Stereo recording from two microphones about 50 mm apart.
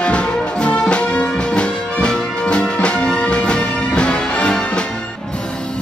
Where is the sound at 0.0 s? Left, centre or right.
Left.